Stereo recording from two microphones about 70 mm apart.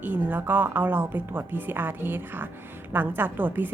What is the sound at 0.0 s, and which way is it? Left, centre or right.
A woman's voice, right.